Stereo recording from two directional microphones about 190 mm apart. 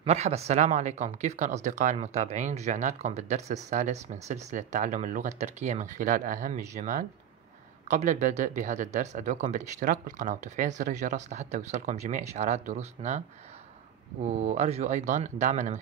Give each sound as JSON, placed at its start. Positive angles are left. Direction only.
{"t": 0.0, "sound": "speech", "side_deg": -35}
{"t": 14.2, "sound": "speech", "side_deg": -35}